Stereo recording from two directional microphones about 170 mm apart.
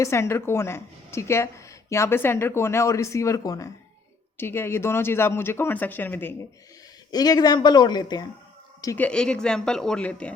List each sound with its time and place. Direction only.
0.0 s speech: 15° left (ahead or behind)
7.1 s speech: 20° left (ahead or behind)
9.0 s speech: 5° left (ahead or behind)